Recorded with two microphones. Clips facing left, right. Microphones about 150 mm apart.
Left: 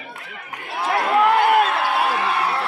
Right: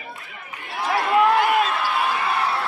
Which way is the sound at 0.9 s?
55° left (ahead or behind).